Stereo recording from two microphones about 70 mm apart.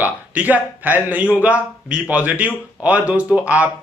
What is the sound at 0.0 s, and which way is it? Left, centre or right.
A man's voice, right.